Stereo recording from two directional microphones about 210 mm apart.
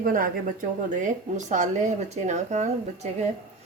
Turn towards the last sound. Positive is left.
turn(degrees=-35)  # may be behind; listen again after turning